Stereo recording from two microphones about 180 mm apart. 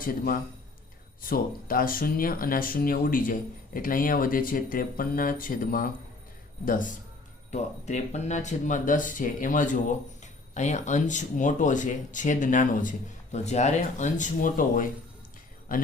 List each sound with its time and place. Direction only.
0.0 s speech: 50° left (ahead or behind)